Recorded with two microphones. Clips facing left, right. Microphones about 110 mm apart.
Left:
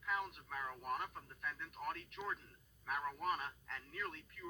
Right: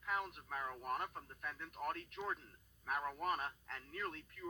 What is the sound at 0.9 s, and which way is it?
Speech, 40° right (ahead or behind).